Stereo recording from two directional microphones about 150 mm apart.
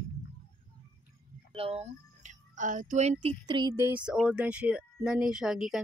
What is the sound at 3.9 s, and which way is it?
Speech, 5° right (ahead or behind).